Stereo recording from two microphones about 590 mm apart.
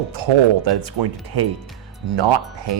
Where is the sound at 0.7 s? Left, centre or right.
Right.